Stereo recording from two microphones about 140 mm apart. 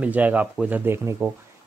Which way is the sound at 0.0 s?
10° right (ahead or behind).